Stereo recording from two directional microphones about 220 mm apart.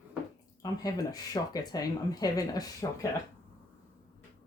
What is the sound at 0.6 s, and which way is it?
Speech, 15° left (ahead or behind).